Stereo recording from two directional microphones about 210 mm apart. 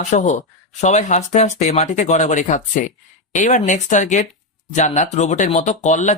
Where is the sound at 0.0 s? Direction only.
35° left (ahead or behind).